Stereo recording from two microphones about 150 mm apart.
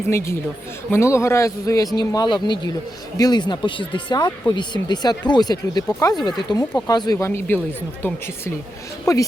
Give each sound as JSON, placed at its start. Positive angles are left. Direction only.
{"t": 0.9, "sound": "speech", "side_deg": 20}
{"t": 9.1, "sound": "speech", "side_deg": 20}